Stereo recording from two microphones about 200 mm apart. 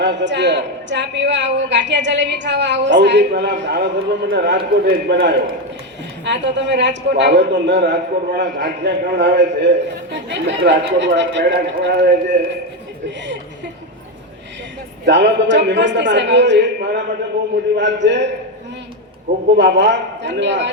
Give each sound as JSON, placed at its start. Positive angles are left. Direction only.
{"t": 0.0, "sound": "a man's voice", "side_deg": -60}
{"t": 15.0, "sound": "a man's voice", "side_deg": -60}
{"t": 19.5, "sound": "a man's voice", "side_deg": -60}